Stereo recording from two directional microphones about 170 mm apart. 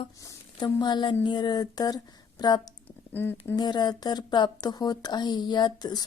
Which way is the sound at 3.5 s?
25° left (ahead or behind).